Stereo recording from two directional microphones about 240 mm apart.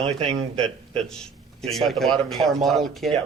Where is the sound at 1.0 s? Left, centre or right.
Centre.